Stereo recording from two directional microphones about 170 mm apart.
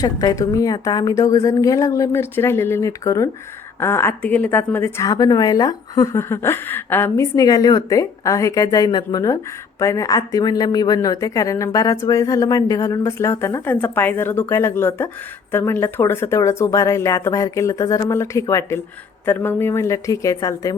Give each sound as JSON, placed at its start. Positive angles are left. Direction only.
{"t": 0.0, "sound": "a woman's voice", "side_deg": 20}